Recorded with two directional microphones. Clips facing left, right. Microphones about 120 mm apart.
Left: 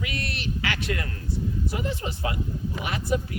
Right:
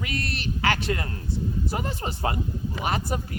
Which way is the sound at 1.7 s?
40° right (ahead or behind).